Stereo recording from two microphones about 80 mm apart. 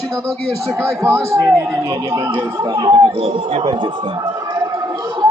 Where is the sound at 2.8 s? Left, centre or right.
Right.